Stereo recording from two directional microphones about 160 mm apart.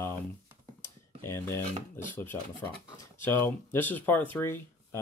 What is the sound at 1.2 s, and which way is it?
Speech, 15° left (ahead or behind).